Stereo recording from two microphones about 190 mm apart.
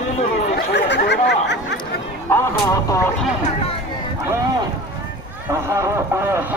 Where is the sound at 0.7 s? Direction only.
60° left (ahead or behind).